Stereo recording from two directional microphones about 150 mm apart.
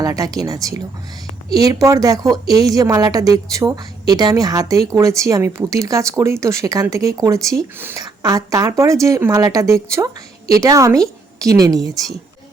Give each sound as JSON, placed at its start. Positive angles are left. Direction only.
{"t": 0.0, "sound": "speech", "side_deg": -25}
{"t": 8.0, "sound": "speech", "side_deg": -25}